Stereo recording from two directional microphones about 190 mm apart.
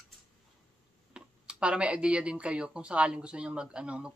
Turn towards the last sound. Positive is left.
turn(degrees=-5)  # may be behind; listen again after turning